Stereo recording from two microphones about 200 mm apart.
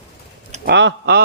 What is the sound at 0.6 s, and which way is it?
Speech, 60° right (ahead or behind).